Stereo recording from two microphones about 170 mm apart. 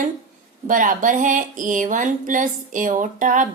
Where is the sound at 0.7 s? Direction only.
50° right (ahead or behind).